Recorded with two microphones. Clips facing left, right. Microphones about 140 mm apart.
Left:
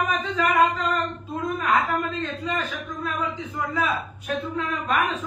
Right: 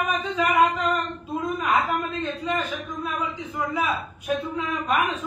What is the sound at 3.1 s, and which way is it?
A man's voice, 10° right (ahead or behind).